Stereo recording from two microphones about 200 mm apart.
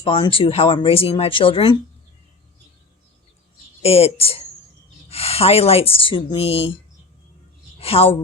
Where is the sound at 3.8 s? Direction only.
30° left (ahead or behind).